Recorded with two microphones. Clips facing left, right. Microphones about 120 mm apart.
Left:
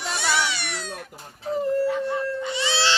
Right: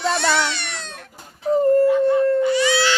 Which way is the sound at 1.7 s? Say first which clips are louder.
Right 8 dB; 50° right (ahead or behind).